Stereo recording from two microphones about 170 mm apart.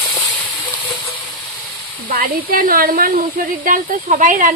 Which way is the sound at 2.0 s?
60° right (ahead or behind).